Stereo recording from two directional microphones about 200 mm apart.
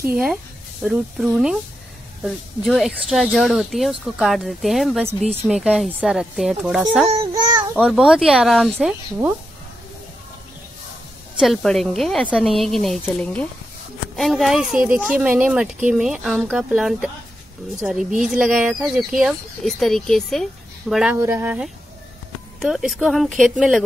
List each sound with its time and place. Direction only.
0.0 s speech: 5° right (ahead or behind)
7.1 s speech: 20° right (ahead or behind)
7.7 s speech: centre (ahead or behind)
11.3 s speech: centre (ahead or behind)